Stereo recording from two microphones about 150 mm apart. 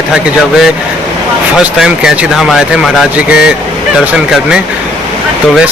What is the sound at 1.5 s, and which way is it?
Speech, 5° right (ahead or behind).